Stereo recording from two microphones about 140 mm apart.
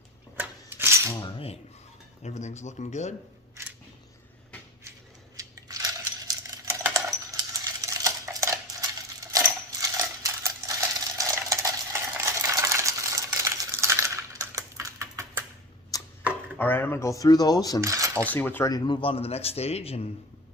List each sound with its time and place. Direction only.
0.3 s rub: 15° right (ahead or behind)
2.2 s speech: 55° left (ahead or behind)
5.4 s coin: 25° right (ahead or behind)
15.1 s typing: 20° right (ahead or behind)
15.9 s a sound: 25° left (ahead or behind)
16.6 s speech: 15° left (ahead or behind)
17.7 s speech: 20° right (ahead or behind)
18.3 s speech: 15° left (ahead or behind)
18.7 s a man's voice: 35° left (ahead or behind)